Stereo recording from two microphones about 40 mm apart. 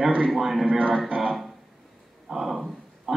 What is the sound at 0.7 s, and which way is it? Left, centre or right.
Speech, right.